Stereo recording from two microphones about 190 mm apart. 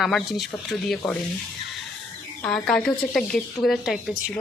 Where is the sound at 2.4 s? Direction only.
5° left (ahead or behind).